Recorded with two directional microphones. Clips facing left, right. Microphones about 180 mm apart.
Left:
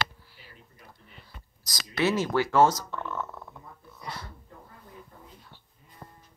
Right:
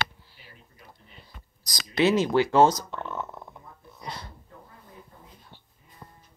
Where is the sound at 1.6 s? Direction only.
15° right (ahead or behind).